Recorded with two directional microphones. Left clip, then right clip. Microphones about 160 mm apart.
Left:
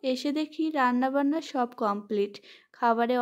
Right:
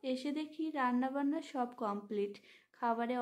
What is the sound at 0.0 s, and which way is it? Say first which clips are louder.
A woman's voice: left 10 dB; 40° left (ahead or behind).